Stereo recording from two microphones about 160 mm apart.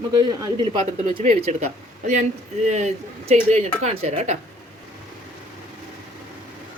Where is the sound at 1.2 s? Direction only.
45° right (ahead or behind).